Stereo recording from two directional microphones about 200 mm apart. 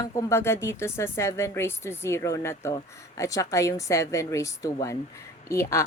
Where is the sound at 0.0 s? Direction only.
15° left (ahead or behind).